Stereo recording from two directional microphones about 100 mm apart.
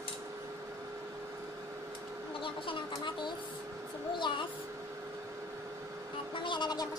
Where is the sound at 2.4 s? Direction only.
60° left (ahead or behind).